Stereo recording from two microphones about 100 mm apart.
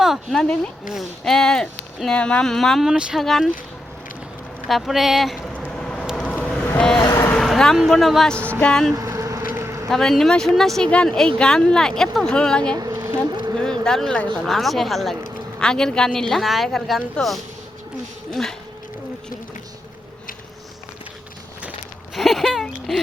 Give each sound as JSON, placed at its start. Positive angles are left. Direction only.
{"t": 0.0, "sound": "speech", "side_deg": 0}
{"t": 4.7, "sound": "speech", "side_deg": 0}
{"t": 5.7, "sound": "vehicle", "side_deg": 10}
{"t": 6.4, "sound": "boat", "side_deg": 10}
{"t": 7.0, "sound": "vehicle", "side_deg": 35}
{"t": 7.3, "sound": "speech", "side_deg": 5}
{"t": 9.0, "sound": "vehicle", "side_deg": -30}
{"t": 9.9, "sound": "speech", "side_deg": 5}
{"t": 12.9, "sound": "bee", "side_deg": -25}
{"t": 13.3, "sound": "a sound", "side_deg": -45}
{"t": 13.8, "sound": "speech", "side_deg": 5}
{"t": 22.1, "sound": "a sound", "side_deg": 0}